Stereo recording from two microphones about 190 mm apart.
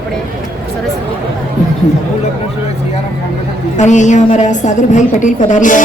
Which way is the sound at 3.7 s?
40° left (ahead or behind).